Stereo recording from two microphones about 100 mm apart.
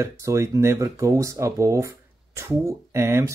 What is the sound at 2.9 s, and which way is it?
Speech, 25° right (ahead or behind).